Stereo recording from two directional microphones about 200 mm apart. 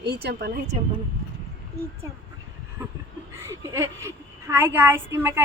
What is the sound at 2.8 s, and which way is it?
A woman's voice, 10° right (ahead or behind).